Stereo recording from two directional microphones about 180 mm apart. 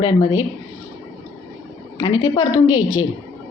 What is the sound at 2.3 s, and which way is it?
Speech, 20° left (ahead or behind).